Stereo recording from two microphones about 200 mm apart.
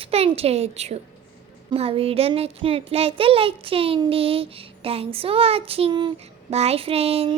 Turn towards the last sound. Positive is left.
turn(degrees=-30)  # may be behind; listen again after turning